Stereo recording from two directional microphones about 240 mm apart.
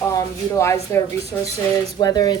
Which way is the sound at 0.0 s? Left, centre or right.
Centre.